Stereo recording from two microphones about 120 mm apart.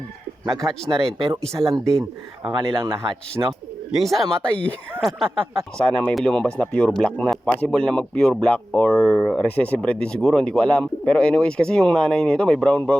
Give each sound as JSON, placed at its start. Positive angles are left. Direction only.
{"t": 0.4, "sound": "speech", "side_deg": 0}
{"t": 1.5, "sound": "speech", "side_deg": -30}
{"t": 2.4, "sound": "speech", "side_deg": -40}
{"t": 3.4, "sound": "speech", "side_deg": -25}
{"t": 3.9, "sound": "speech", "side_deg": 0}